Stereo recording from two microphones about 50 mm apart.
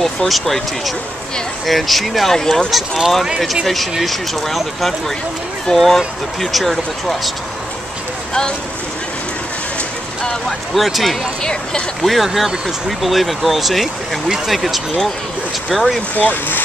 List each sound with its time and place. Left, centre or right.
0.0 s speech: centre
10.7 s speech: centre
16.2 s speech: left